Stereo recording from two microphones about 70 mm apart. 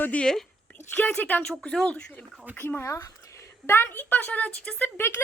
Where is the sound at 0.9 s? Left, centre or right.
Left.